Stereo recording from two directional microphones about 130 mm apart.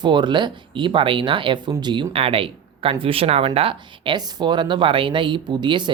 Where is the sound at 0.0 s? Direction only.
35° right (ahead or behind).